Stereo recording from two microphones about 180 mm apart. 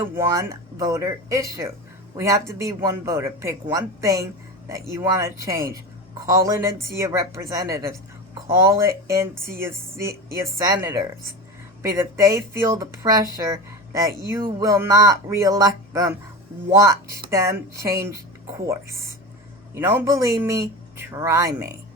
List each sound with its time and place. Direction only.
0.0 s a man's voice: 15° right (ahead or behind)
17.3 s a man's voice: 15° right (ahead or behind)